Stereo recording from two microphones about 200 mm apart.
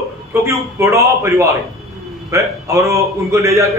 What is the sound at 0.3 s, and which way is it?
A man's voice, 15° right (ahead or behind).